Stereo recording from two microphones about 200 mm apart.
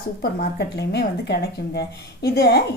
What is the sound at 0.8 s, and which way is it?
A woman's voice, 55° left (ahead or behind).